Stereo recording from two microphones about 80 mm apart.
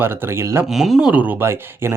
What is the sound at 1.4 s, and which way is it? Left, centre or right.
Speech, right.